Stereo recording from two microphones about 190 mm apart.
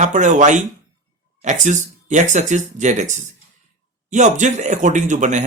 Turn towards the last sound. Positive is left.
turn(degrees=-40)  # may be behind; listen again after turning